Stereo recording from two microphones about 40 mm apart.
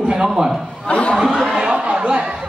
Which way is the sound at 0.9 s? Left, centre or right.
Left.